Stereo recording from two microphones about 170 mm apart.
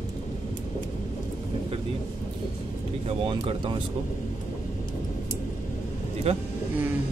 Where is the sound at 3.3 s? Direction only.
30° right (ahead or behind).